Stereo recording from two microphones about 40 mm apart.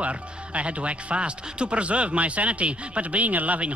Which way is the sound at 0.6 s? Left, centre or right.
Right.